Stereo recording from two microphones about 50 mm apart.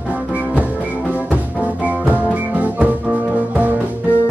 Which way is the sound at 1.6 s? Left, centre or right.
Right.